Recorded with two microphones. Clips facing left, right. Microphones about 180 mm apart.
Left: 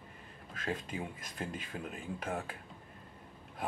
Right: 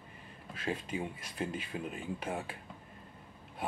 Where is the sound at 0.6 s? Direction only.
Centre (ahead or behind).